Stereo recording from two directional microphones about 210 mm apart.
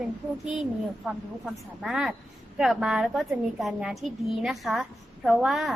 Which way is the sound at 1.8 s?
Centre (ahead or behind).